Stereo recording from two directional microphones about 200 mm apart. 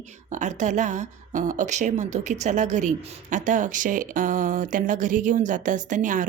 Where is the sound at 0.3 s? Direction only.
35° right (ahead or behind).